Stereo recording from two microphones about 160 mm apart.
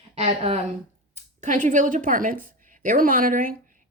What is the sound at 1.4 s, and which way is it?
Speech, 50° right (ahead or behind).